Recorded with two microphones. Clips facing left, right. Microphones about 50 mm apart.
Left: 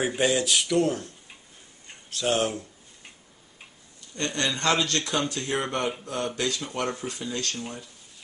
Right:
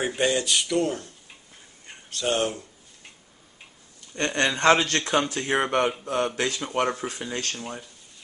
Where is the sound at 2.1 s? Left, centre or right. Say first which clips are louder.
Even; centre.